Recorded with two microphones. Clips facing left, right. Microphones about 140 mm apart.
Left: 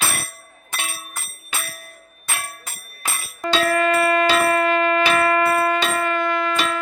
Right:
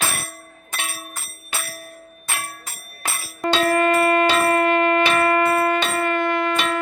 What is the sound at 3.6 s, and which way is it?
Music, 45° right (ahead or behind).